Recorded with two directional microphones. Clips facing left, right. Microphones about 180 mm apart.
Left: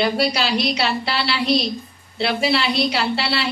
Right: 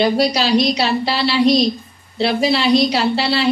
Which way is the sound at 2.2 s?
35° right (ahead or behind).